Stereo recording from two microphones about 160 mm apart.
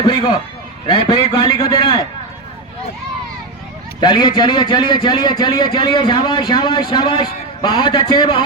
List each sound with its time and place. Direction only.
0.0 s a man's voice: 30° left (ahead or behind)
4.0 s a man's voice: 30° left (ahead or behind)